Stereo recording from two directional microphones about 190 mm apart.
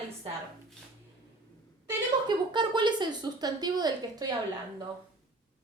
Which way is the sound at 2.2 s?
25° right (ahead or behind).